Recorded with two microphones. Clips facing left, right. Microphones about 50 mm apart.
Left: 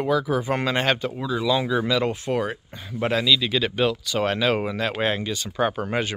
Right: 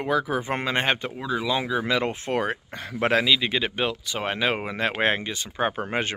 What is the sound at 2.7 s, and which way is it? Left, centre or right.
Speech, right.